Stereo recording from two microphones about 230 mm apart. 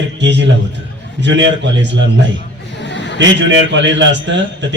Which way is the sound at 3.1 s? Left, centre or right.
Right.